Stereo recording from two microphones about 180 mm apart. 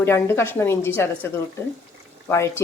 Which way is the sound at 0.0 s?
15° left (ahead or behind).